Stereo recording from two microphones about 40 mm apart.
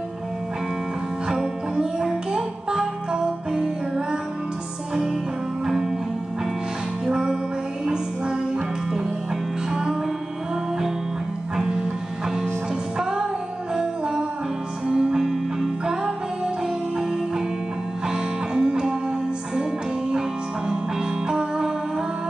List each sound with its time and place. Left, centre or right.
1.3 s music: centre
7.1 s music: centre
9.7 s music: centre
11.5 s music: centre
12.9 s music: centre
18.0 s music: centre